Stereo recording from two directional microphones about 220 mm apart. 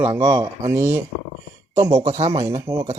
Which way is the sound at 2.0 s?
30° right (ahead or behind).